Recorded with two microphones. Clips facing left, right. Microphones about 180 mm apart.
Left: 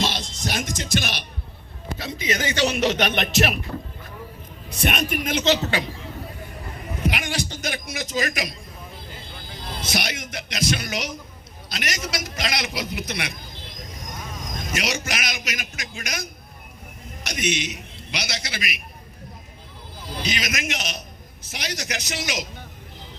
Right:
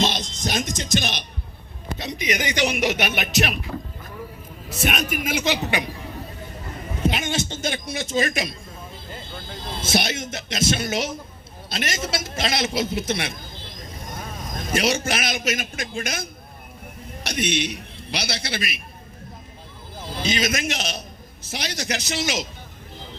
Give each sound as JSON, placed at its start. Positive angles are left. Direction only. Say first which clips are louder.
{"t": 0.0, "sound": "speech", "louder": "right 3 dB", "side_deg": -20}
{"t": 4.7, "sound": "speech", "louder": "even", "side_deg": 0}
{"t": 7.0, "sound": "a man's voice", "louder": "right 2 dB", "side_deg": -25}
{"t": 9.6, "sound": "a man's voice", "louder": "right 4 dB", "side_deg": -25}
{"t": 14.6, "sound": "a man's voice", "louder": "right 6 dB", "side_deg": -30}
{"t": 20.0, "sound": "a man's voice", "louder": "right 4 dB", "side_deg": -25}